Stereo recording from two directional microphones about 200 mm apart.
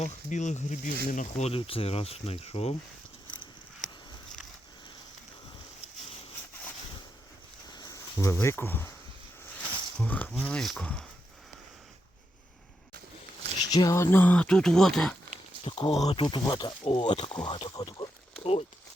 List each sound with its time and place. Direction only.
0.0 s speech: 35° left (ahead or behind)
7.7 s a sound: 20° left (ahead or behind)
9.6 s speech: 5° left (ahead or behind)
13.7 s speech: 20° left (ahead or behind); by 15.1 s centre (ahead or behind)
15.6 s speech: 30° left (ahead or behind)